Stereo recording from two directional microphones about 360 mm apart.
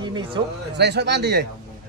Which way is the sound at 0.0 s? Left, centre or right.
Centre.